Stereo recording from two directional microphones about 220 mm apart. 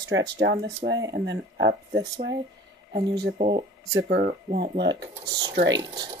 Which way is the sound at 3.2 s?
45° right (ahead or behind).